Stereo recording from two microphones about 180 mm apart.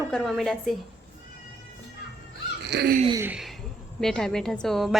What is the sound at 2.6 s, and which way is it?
Speech, 65° right (ahead or behind).